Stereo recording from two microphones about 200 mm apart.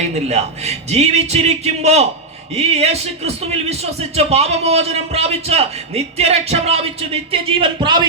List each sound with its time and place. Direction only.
0.3 s a man's voice: 35° right (ahead or behind)